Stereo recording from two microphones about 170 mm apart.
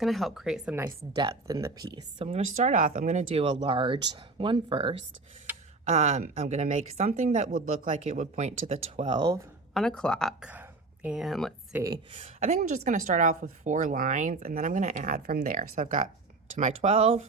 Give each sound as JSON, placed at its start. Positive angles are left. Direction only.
{"t": 0.0, "sound": "speech", "side_deg": 0}
{"t": 1.1, "sound": "speech", "side_deg": -20}
{"t": 2.2, "sound": "a woman's voice", "side_deg": -40}
{"t": 3.4, "sound": "a woman's voice", "side_deg": -30}
{"t": 9.0, "sound": "speech", "side_deg": -25}
{"t": 9.7, "sound": "speech", "side_deg": 5}
{"t": 10.5, "sound": "speech", "side_deg": -10}
{"t": 11.7, "sound": "speech", "side_deg": -20}
{"t": 12.1, "sound": "a woman's voice", "side_deg": -40}